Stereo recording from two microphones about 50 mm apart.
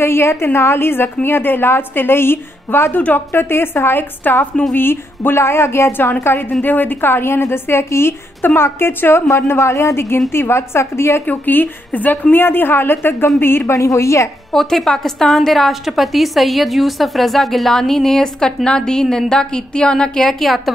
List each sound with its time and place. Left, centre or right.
0.0 s a woman's voice: left
6.6 s a woman's voice: left
9.6 s a woman's voice: left
10.3 s a woman's voice: left
11.2 s a woman's voice: left
13.7 s a woman's voice: left
14.5 s a woman's voice: centre